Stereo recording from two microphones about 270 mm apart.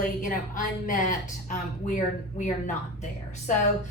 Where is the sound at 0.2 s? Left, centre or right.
Left.